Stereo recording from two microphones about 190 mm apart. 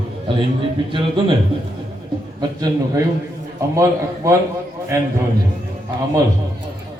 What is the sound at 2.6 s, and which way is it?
Speech, 20° right (ahead or behind).